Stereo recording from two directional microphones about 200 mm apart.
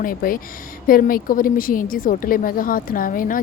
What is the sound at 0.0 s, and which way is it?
A woman's voice, 45° left (ahead or behind).